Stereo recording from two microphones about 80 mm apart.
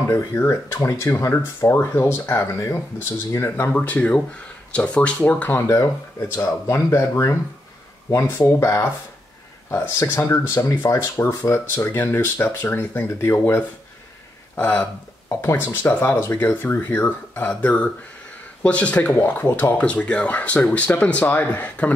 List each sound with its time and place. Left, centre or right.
0.1 s speech: left
3.5 s speech: centre
5.6 s speech: left
10.5 s speech: left
14.5 s a sound: left
15.4 s speech: left
16.2 s speech: left
17.5 s speech: centre